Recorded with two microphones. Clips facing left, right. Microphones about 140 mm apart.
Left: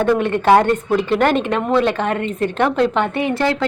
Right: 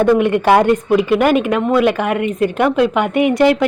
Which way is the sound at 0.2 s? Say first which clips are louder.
Right 2 dB; 15° right (ahead or behind).